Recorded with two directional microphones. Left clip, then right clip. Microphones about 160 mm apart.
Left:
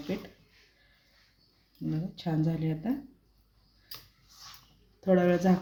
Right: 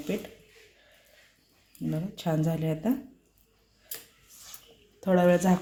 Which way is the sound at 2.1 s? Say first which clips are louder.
Right 4 dB; 25° right (ahead or behind).